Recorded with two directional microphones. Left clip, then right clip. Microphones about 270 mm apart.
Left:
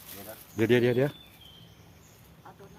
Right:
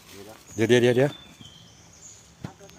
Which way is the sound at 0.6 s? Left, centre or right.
Centre.